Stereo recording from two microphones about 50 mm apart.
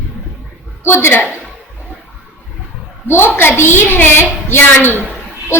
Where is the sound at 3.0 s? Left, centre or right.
Left.